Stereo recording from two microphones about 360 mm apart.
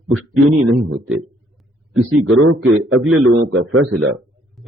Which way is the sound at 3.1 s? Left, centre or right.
Right.